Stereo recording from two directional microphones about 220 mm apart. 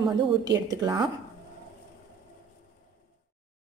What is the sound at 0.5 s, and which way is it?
Speech, 15° right (ahead or behind).